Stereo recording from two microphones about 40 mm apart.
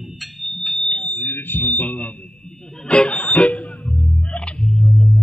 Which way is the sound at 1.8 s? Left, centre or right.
Left.